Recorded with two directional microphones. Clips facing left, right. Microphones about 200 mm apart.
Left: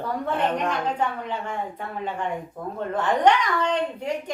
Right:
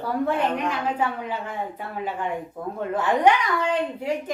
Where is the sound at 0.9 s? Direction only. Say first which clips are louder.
Right 1 dB; 5° right (ahead or behind).